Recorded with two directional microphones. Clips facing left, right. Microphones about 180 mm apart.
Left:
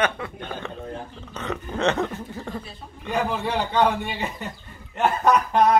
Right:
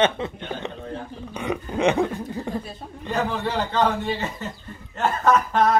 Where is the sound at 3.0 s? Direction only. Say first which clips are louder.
Even; 10° left (ahead or behind).